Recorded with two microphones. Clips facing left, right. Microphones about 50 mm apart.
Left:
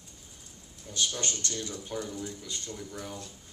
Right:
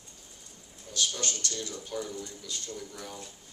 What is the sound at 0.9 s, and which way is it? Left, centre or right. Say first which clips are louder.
Speech: even; left.